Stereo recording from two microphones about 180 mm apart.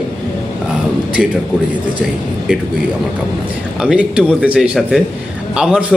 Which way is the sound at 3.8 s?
5° right (ahead or behind).